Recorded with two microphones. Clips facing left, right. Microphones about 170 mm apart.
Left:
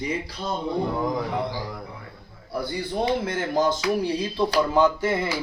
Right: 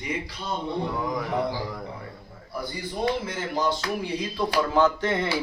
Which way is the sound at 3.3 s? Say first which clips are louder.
Left 4 dB; 50° left (ahead or behind).